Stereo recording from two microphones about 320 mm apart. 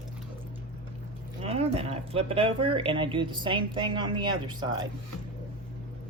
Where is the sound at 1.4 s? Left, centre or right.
Centre.